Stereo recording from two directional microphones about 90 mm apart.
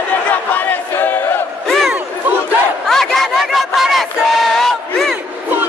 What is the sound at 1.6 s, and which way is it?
Crowd, 5° left (ahead or behind).